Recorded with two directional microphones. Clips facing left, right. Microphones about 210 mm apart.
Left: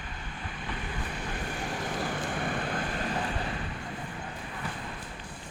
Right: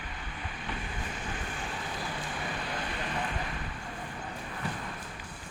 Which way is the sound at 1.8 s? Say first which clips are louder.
Left 5 dB; 50° left (ahead or behind).